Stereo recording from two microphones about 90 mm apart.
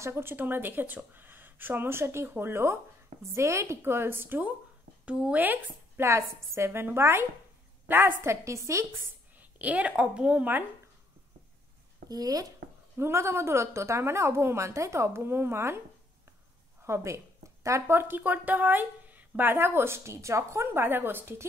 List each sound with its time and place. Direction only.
0.0 s a woman's voice: 25° right (ahead or behind)
9.4 s a woman's voice: 15° right (ahead or behind)
12.1 s speech: 45° right (ahead or behind)
12.9 s speech: 30° right (ahead or behind)
16.8 s speech: 30° right (ahead or behind)